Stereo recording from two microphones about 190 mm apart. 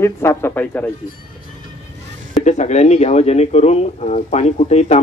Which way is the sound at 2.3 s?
40° left (ahead or behind).